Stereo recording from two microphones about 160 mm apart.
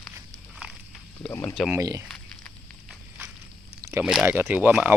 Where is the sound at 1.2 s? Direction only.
15° left (ahead or behind).